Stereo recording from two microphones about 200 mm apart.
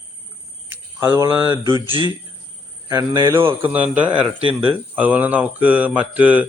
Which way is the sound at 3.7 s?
5° right (ahead or behind).